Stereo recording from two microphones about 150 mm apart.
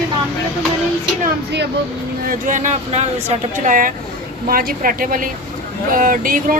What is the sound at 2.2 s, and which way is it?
Speech, 55° right (ahead or behind).